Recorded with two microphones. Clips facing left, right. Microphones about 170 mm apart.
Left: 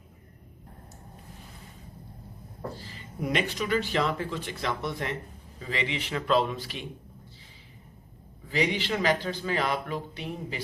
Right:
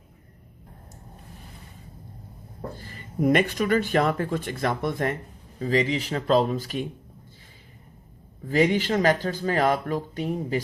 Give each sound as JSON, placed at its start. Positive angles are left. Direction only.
{"t": 2.7, "sound": "speech", "side_deg": -50}
{"t": 8.4, "sound": "speech", "side_deg": -45}